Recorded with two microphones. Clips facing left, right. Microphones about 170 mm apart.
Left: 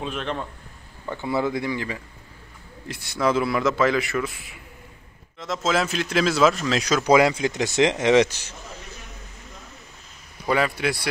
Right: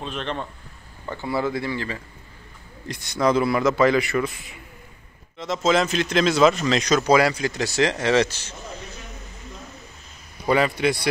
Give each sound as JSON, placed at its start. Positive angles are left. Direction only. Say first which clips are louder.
{"t": 0.0, "sound": "a man's voice", "louder": "left 1 dB", "side_deg": 5}
{"t": 1.1, "sound": "speech", "louder": "left 1 dB", "side_deg": 20}
{"t": 2.9, "sound": "a man's voice", "louder": "right 2 dB", "side_deg": 5}
{"t": 7.1, "sound": "speech", "louder": "left 3 dB", "side_deg": 20}
{"t": 10.5, "sound": "a man's voice", "louder": "right 3 dB", "side_deg": 0}